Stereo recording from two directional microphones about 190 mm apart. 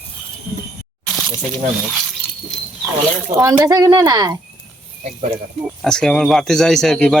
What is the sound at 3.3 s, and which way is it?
Speech, 15° right (ahead or behind).